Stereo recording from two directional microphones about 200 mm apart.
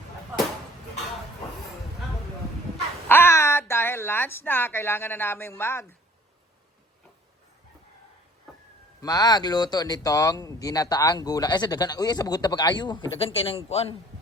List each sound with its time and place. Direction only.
3.1 s speech: 10° left (ahead or behind)
9.0 s speech: 20° left (ahead or behind)